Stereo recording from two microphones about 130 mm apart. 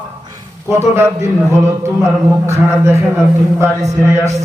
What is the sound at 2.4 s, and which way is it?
A man's voice, 20° right (ahead or behind).